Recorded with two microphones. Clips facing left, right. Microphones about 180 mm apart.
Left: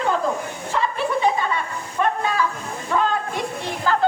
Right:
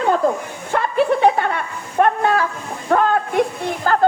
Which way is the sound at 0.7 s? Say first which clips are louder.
Right 6 dB; 60° right (ahead or behind).